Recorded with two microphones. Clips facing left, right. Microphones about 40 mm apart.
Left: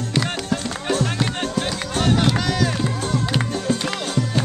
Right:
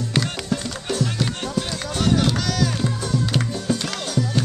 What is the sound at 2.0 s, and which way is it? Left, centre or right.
Music, left.